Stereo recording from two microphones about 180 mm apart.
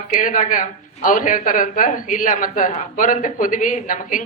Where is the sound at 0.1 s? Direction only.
45° left (ahead or behind).